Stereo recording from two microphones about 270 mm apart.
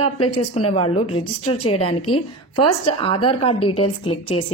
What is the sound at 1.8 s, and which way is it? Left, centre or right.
Speech, left.